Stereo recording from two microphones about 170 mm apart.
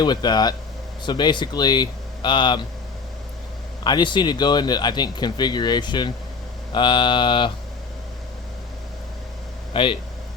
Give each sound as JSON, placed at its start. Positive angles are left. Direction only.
{"t": 0.0, "sound": "speech", "side_deg": 25}
{"t": 3.8, "sound": "speech", "side_deg": 25}
{"t": 9.7, "sound": "speech", "side_deg": 30}